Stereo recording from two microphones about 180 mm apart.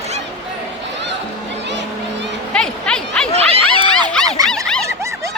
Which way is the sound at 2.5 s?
5° left (ahead or behind).